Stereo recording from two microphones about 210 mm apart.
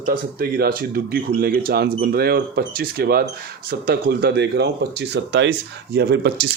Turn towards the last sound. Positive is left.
turn(degrees=-50)  # may be behind; listen again after turning